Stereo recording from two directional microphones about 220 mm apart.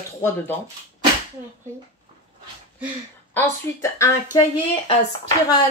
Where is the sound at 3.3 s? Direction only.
10° left (ahead or behind).